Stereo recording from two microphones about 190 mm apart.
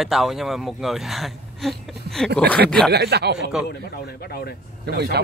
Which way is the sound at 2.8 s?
60° right (ahead or behind).